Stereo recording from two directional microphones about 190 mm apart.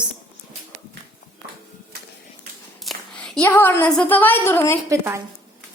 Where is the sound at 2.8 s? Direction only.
Centre (ahead or behind).